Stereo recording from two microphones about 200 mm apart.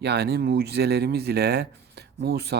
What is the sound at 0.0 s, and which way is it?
Speech, 55° right (ahead or behind).